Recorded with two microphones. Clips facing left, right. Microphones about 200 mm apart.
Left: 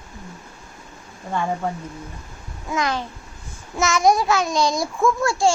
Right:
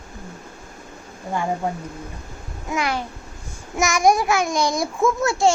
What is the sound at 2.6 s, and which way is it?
Babbling, 15° right (ahead or behind).